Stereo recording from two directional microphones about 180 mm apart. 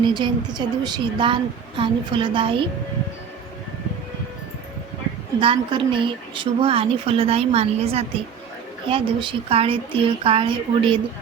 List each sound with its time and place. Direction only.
0.0 s a woman's voice: 25° right (ahead or behind)
5.4 s a woman's voice: 30° right (ahead or behind)